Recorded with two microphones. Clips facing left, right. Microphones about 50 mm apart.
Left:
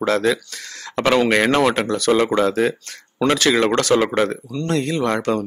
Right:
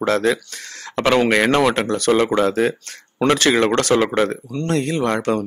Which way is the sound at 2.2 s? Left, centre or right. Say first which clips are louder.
Even; centre.